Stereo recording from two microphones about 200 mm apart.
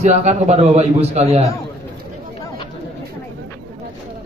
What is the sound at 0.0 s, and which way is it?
A man's voice, 35° right (ahead or behind).